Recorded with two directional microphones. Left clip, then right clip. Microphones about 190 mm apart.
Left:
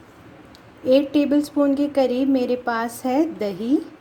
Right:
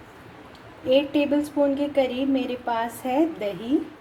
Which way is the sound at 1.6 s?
40° left (ahead or behind).